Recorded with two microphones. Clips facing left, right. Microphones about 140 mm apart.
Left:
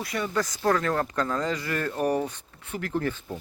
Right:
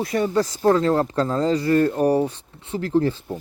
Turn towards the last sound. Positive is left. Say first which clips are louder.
# right 8 dB
turn(degrees=-30)  # may be behind; listen again after turning